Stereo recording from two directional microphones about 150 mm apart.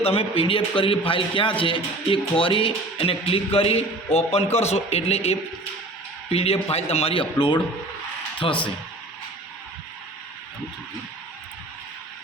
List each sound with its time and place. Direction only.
0.0 s a man's voice: 40° left (ahead or behind)